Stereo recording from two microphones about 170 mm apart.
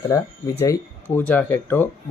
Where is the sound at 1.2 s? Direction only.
10° left (ahead or behind).